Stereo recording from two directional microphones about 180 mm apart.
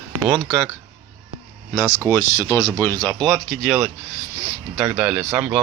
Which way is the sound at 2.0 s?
15° left (ahead or behind).